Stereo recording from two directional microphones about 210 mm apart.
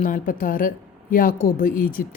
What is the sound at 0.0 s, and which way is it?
A woman's voice, 40° left (ahead or behind).